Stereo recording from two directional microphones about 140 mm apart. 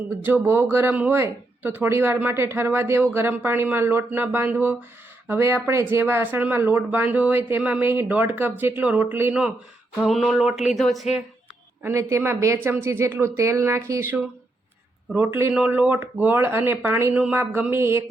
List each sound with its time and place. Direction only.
0.2 s speech: 15° right (ahead or behind)
10.0 s a sound: centre (ahead or behind)
11.8 s speech: 20° right (ahead or behind)